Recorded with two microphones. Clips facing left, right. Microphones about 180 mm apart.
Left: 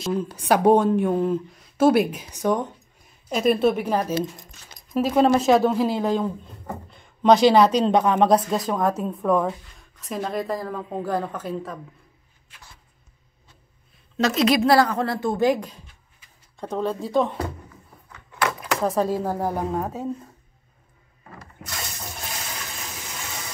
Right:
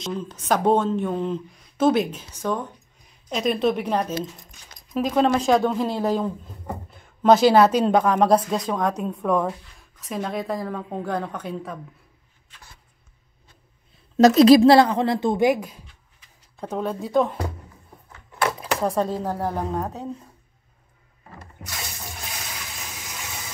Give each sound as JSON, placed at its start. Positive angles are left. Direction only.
{"t": 0.0, "sound": "a woman's voice", "side_deg": 10}
{"t": 14.1, "sound": "a woman's voice", "side_deg": -40}
{"t": 18.8, "sound": "a woman's voice", "side_deg": 0}